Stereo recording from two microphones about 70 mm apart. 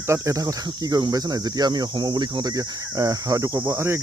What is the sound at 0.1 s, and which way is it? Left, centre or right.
Speech, right.